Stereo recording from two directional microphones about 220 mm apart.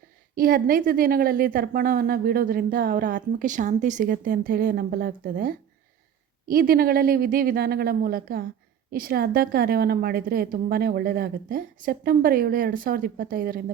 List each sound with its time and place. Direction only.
0.3 s a woman's voice: 40° right (ahead or behind)